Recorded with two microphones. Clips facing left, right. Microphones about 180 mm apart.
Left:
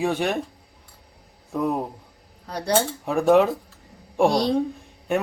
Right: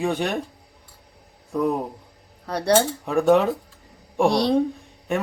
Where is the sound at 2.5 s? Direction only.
65° right (ahead or behind).